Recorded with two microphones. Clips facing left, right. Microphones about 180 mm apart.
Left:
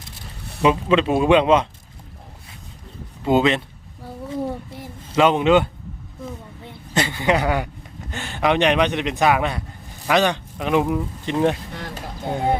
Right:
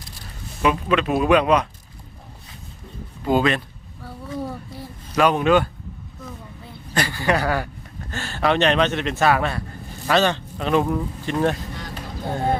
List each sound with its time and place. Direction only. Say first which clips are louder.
0.6 s speech: left 3 dB; 25° left (ahead or behind)
3.2 s speech: left 2 dB; 20° left (ahead or behind)
4.0 s a sound: left 3 dB; 25° left (ahead or behind)
5.0 s speech: left 2 dB; 25° left (ahead or behind)
6.9 s speech: left 2 dB; 20° left (ahead or behind)